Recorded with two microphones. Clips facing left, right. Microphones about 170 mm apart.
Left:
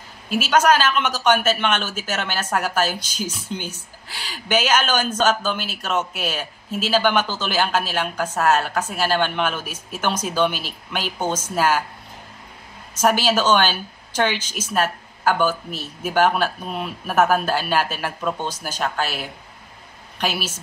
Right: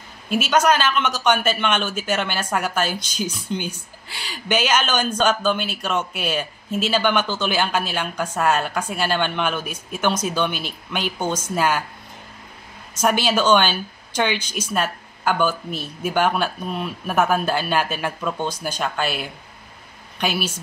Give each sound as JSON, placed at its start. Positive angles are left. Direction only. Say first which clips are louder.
{"t": 0.3, "sound": "speech", "louder": "left 1 dB", "side_deg": 5}
{"t": 12.9, "sound": "speech", "louder": "left 1 dB", "side_deg": 5}